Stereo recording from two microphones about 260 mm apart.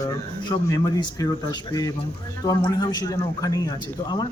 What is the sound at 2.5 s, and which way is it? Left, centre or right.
Speech, centre.